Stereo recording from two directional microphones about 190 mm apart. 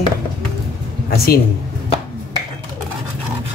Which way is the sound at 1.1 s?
55° left (ahead or behind).